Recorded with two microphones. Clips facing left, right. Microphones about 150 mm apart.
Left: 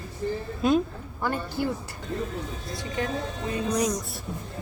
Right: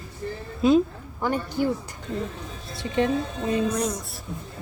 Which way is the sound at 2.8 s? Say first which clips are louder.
Right 7 dB; 25° right (ahead or behind).